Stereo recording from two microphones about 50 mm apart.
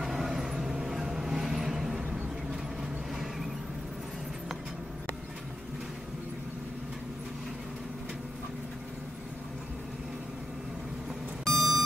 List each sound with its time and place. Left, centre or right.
0.0 s vehicle: centre
2.0 s a sound: right
11.4 s vehicle: centre